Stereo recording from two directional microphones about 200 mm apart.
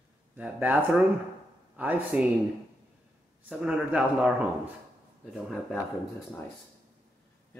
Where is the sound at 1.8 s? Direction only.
10° right (ahead or behind).